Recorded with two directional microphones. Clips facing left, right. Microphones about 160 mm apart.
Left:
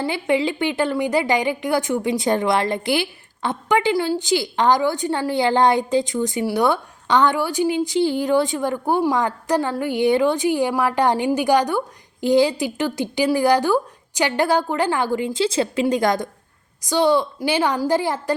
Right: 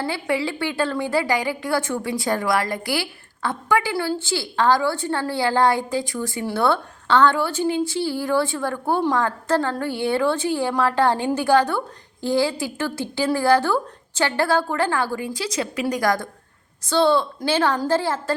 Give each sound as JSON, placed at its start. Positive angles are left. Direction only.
{"t": 0.0, "sound": "a woman's voice", "side_deg": 20}